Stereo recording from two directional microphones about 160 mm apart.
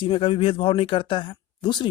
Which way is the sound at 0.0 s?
35° left (ahead or behind).